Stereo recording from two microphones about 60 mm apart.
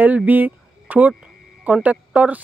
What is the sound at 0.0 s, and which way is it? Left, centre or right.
Speech, right.